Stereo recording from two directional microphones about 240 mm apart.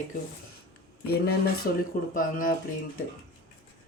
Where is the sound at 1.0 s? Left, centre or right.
Left.